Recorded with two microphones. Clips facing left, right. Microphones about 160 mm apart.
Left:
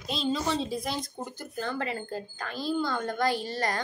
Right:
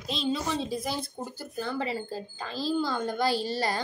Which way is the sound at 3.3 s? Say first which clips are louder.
Right 3 dB; 90° right.